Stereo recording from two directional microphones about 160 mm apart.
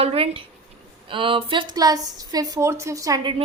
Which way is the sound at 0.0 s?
35° right (ahead or behind).